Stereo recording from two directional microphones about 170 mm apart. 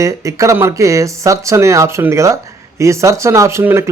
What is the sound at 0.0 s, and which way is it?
Speech, 20° right (ahead or behind).